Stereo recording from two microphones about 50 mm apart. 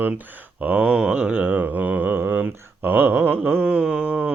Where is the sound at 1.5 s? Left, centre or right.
Right.